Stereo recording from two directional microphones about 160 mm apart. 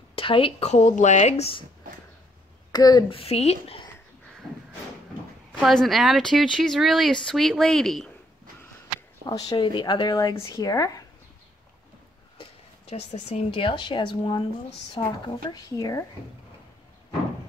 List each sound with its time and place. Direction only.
0.1 s speech: 35° left (ahead or behind)
2.7 s speech: 25° left (ahead or behind)
3.2 s speech: 40° left (ahead or behind)
5.5 s speech: centre (ahead or behind)
9.2 s speech: 25° left (ahead or behind)
12.9 s speech: 40° left (ahead or behind); by 16.0 s 25° left (ahead or behind)